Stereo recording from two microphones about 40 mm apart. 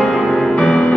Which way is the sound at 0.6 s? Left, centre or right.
Left.